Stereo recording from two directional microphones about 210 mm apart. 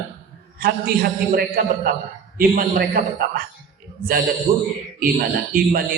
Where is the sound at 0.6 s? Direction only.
45° right (ahead or behind).